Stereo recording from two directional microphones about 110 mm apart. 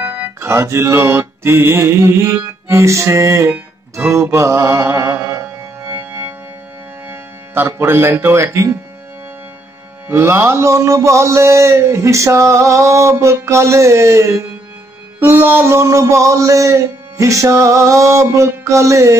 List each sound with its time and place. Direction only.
0.0 s music: 20° right (ahead or behind)
7.1 s speech: 20° right (ahead or behind)
10.0 s mantra: 20° right (ahead or behind)